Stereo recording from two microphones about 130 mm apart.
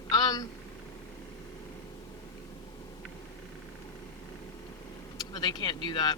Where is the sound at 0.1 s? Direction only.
30° left (ahead or behind).